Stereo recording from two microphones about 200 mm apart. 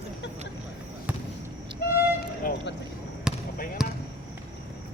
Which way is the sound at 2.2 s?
50° left (ahead or behind).